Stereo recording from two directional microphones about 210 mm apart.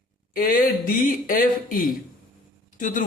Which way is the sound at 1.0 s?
40° left (ahead or behind).